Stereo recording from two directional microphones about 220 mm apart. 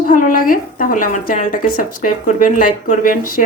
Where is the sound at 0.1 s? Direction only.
40° left (ahead or behind).